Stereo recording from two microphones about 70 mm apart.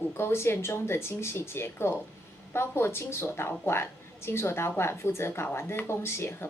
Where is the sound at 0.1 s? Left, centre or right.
Left.